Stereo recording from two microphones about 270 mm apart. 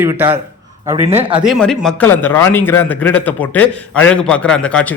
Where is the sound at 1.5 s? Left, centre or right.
Centre.